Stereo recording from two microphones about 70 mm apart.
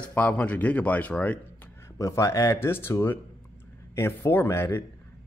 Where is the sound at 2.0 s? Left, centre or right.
Left.